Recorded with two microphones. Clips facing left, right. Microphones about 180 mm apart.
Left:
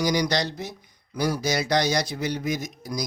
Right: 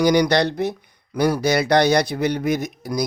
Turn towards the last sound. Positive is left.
turn(degrees=-60)  # may be behind; listen again after turning